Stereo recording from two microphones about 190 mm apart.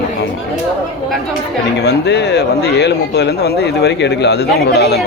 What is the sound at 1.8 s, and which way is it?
Speech, 60° left (ahead or behind).